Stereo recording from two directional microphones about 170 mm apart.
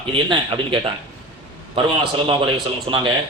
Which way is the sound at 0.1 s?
30° right (ahead or behind).